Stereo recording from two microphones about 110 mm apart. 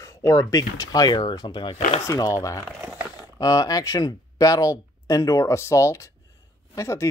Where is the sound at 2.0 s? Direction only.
30° left (ahead or behind).